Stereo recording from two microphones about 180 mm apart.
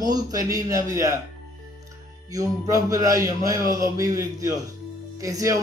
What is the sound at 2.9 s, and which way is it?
A man's voice, 20° right (ahead or behind).